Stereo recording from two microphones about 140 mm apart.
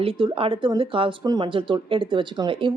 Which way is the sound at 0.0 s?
40° right (ahead or behind).